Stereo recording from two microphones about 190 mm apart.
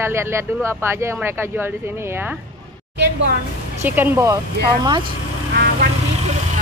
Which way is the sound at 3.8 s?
10° right (ahead or behind).